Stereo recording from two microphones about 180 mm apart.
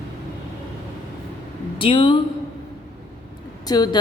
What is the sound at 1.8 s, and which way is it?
Speech, 30° left (ahead or behind).